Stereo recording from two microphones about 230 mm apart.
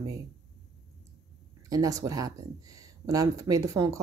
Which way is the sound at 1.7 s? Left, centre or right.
Centre.